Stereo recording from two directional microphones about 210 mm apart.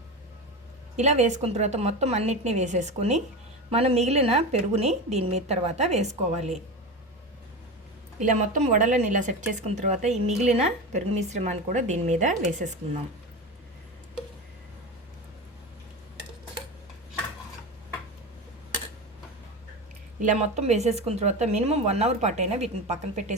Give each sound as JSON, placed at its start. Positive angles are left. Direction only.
{"t": 0.9, "sound": "speech", "side_deg": -35}
{"t": 8.2, "sound": "speech", "side_deg": -35}
{"t": 20.2, "sound": "speech", "side_deg": -30}